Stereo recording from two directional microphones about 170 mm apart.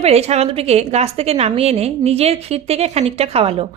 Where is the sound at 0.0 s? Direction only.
40° right (ahead or behind).